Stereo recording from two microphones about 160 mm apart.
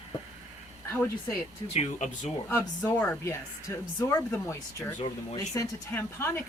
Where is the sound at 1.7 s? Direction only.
45° left (ahead or behind).